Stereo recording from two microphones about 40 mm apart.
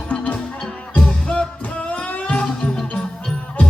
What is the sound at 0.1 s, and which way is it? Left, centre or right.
Music, left.